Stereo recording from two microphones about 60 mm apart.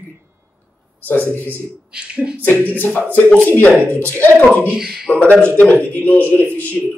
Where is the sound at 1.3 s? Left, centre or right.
Left.